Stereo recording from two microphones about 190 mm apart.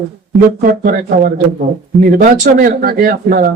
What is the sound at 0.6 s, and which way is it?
Speech, 50° right (ahead or behind).